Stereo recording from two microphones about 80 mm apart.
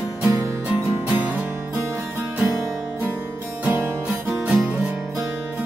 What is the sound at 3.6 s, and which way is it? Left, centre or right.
Music, right.